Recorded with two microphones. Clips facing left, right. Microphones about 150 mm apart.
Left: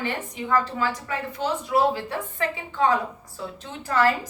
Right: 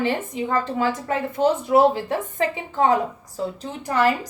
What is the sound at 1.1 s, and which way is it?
Speech, 50° right (ahead or behind).